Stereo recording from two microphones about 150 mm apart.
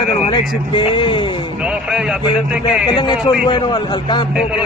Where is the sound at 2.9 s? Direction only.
30° left (ahead or behind).